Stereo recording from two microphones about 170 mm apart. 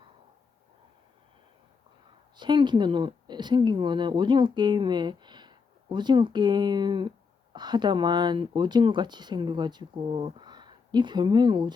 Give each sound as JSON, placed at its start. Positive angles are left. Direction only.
{"t": 2.3, "sound": "speech", "side_deg": -25}